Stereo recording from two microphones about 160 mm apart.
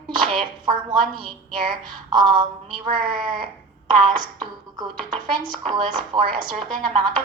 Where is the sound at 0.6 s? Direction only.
30° right (ahead or behind).